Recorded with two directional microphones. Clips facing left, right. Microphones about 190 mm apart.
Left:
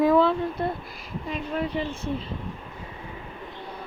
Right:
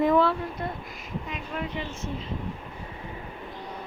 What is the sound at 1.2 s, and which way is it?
Speech, 35° left (ahead or behind).